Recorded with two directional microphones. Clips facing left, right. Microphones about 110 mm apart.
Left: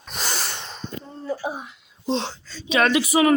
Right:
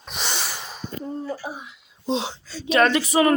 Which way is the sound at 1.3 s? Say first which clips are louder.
Left 4 dB; 20° left (ahead or behind).